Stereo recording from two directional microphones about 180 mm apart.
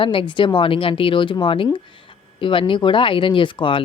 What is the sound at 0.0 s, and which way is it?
Speech, 30° left (ahead or behind).